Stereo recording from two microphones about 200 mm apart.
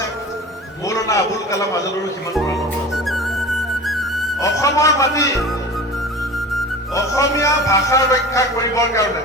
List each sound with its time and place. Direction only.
0.9 s a man's voice: 15° left (ahead or behind)
2.9 s music: centre (ahead or behind)
4.4 s a man's voice: 15° left (ahead or behind)
6.9 s a man's voice: 15° left (ahead or behind)